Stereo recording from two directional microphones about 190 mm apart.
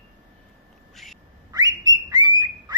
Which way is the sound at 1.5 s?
20° right (ahead or behind).